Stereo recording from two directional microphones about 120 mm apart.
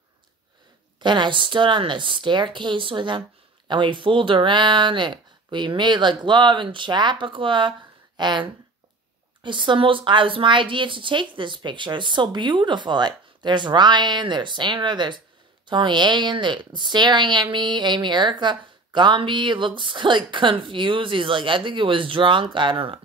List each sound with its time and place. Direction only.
0.9 s a woman's voice: 40° right (ahead or behind)